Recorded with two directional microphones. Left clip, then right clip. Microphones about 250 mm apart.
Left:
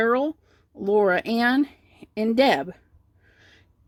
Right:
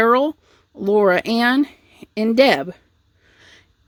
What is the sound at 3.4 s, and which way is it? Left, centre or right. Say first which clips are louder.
Sniff: right 7 dB; right.